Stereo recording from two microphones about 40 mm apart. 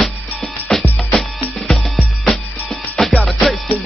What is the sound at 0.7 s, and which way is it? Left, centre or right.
Music, left.